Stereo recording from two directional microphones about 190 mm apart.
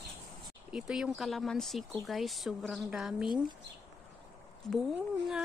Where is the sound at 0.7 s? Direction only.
5° right (ahead or behind).